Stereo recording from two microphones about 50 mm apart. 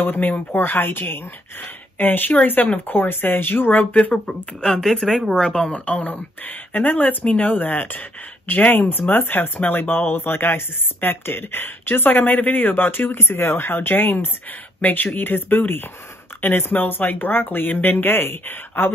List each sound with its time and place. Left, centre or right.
0.0 s speech: left
4.1 s speech: centre
5.3 s speech: centre; by 18.9 s left